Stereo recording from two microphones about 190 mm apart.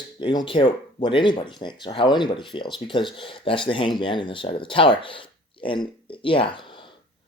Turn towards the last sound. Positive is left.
turn(degrees=25)  # may be behind; listen again after turning